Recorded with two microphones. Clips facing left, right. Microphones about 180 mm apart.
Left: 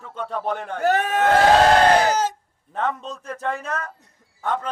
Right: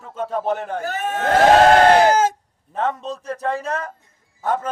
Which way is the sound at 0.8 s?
75° left (ahead or behind).